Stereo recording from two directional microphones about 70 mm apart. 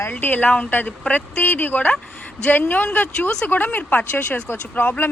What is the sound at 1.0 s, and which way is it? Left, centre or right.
Speech, centre.